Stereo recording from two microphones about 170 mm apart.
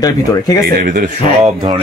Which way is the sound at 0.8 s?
55° right (ahead or behind).